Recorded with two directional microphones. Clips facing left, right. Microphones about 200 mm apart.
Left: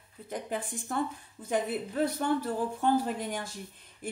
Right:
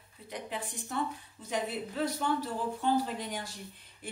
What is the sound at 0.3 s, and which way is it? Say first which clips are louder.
Speech: left 4 dB; 50° left (ahead or behind).